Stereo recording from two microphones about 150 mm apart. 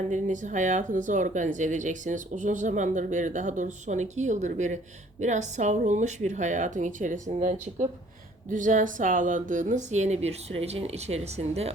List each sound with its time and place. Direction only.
0.1 s speech: 55° right (ahead or behind)